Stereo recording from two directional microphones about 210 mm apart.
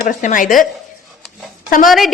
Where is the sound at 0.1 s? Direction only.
40° left (ahead or behind).